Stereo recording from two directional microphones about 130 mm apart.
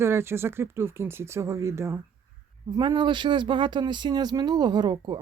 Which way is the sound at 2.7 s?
35° right (ahead or behind).